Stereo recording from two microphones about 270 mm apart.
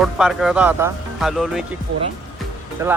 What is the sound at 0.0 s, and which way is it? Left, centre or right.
Speech, centre.